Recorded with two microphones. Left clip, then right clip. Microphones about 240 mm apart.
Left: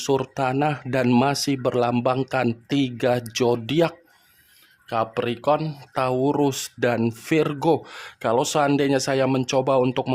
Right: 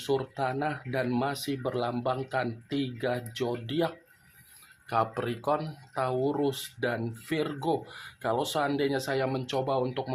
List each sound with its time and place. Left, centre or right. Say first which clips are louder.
0.0 s speech: left 7 dB; left